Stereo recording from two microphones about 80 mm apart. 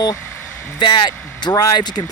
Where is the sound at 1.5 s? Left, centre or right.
Left.